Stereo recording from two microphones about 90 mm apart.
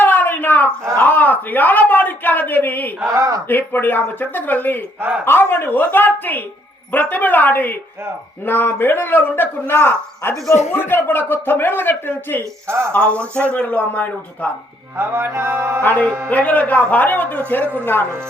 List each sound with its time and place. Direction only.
0.0 s a sound: 20° left (ahead or behind)
1.0 s speech: 20° left (ahead or behind)
3.1 s speech: 40° right (ahead or behind)
3.5 s speech: 20° left (ahead or behind)
12.6 s music: 30° right (ahead or behind)
12.9 s speech: 15° left (ahead or behind)
14.9 s music: 25° right (ahead or behind)
15.8 s speech: 20° left (ahead or behind)
16.0 s music: 25° right (ahead or behind)
16.3 s speech: 15° left (ahead or behind)